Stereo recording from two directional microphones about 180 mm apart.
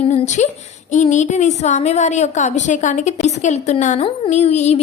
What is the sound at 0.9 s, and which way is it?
A woman's voice, 40° left (ahead or behind).